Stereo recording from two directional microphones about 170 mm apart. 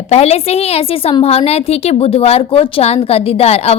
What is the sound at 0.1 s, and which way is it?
A woman's voice, 40° left (ahead or behind).